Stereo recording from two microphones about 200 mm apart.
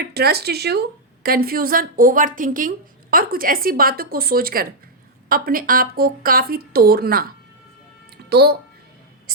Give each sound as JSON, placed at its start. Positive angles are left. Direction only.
{"t": 0.0, "sound": "a woman's voice", "side_deg": -50}
{"t": 8.3, "sound": "speech", "side_deg": -55}